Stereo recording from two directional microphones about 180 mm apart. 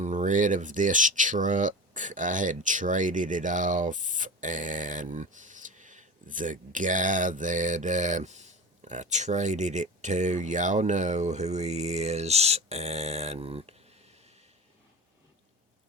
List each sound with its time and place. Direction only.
0.0 s speech: 40° right (ahead or behind)